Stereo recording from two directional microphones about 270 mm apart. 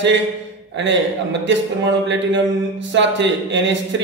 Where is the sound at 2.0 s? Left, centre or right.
Right.